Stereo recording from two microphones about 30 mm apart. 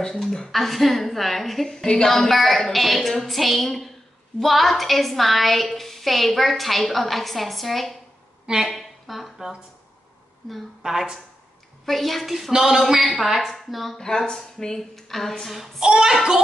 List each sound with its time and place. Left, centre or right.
0.1 s a woman's voice: centre
8.6 s a sound: centre
10.8 s a woman's voice: centre
11.8 s a woman's voice: centre
12.5 s a woman's voice: centre
13.2 s a woman's voice: centre
13.9 s a woman's voice: centre
14.8 s speech: centre
15.4 s a woman's voice: centre
16.1 s a child's voice: centre